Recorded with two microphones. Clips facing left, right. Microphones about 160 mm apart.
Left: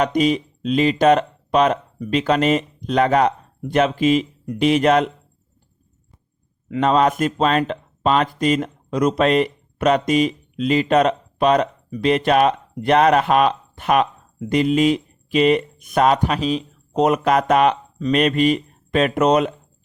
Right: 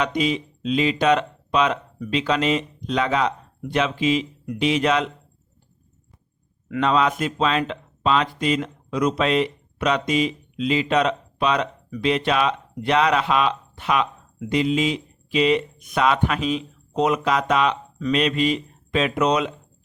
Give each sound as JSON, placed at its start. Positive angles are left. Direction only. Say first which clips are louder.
{"t": 0.0, "sound": "speech", "louder": "left 5 dB", "side_deg": 45}
{"t": 6.7, "sound": "speech", "louder": "left 4 dB", "side_deg": 45}